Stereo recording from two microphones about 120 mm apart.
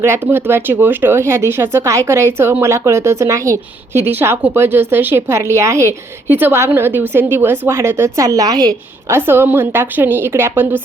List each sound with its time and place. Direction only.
0.0 s speech: 20° right (ahead or behind)
9.0 s speech: 20° right (ahead or behind)